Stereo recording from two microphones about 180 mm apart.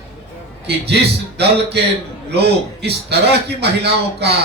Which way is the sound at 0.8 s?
65° right (ahead or behind).